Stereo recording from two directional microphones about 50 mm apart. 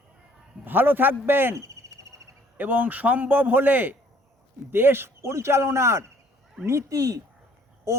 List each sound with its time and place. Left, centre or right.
0.6 s a man's voice: right
1.5 s insect: right
2.6 s a man's voice: right
4.7 s a man's voice: right